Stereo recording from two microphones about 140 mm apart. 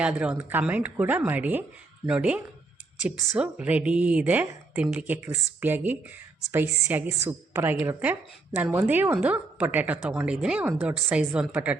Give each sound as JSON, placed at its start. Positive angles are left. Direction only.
{"t": 0.0, "sound": "speech", "side_deg": -10}